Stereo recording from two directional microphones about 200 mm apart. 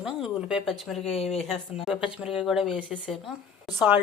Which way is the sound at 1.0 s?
30° left (ahead or behind).